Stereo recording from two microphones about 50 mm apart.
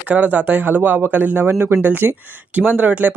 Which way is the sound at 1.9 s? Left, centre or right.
Right.